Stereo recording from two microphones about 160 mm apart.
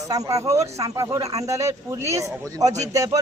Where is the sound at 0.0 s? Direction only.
20° right (ahead or behind).